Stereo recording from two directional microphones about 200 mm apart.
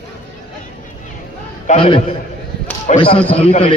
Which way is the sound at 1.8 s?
25° left (ahead or behind).